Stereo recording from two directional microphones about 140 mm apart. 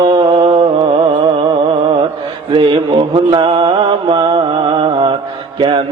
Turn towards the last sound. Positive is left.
turn(degrees=-35)  # may be behind; listen again after turning